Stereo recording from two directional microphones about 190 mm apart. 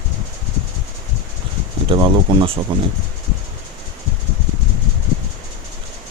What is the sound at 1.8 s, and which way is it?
Speech, 25° right (ahead or behind).